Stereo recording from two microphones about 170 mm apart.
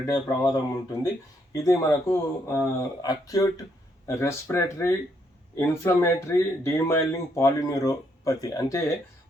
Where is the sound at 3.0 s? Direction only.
20° left (ahead or behind).